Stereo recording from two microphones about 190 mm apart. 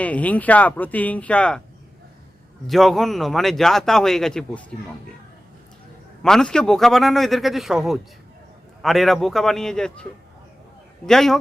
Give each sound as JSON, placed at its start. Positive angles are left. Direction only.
{"t": 0.0, "sound": "speech", "side_deg": 5}
{"t": 2.6, "sound": "speech", "side_deg": 0}
{"t": 6.2, "sound": "speech", "side_deg": 5}